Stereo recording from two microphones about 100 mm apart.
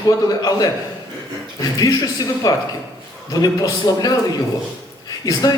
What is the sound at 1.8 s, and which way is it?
A man's voice, 40° left (ahead or behind).